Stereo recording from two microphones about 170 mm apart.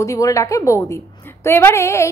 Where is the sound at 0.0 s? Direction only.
20° left (ahead or behind).